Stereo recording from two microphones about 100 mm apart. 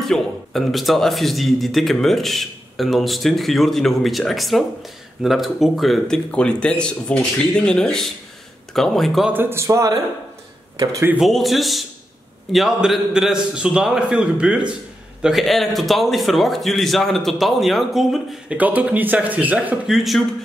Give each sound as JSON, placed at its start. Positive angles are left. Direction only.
{"t": 0.0, "sound": "speech", "side_deg": 0}
{"t": 9.3, "sound": "speech", "side_deg": -20}
{"t": 11.1, "sound": "a man's voice", "side_deg": 0}
{"t": 18.6, "sound": "a man's voice", "side_deg": -15}
{"t": 19.9, "sound": "speech", "side_deg": 0}